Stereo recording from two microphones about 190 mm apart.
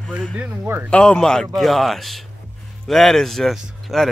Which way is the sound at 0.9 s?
5° left (ahead or behind).